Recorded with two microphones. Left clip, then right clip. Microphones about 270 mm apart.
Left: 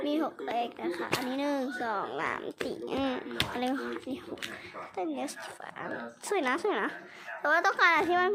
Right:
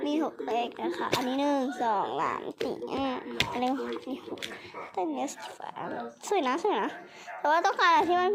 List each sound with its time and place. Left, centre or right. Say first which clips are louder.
0.0 s speech: right 1 dB; centre
4.9 s speech: right 3 dB; centre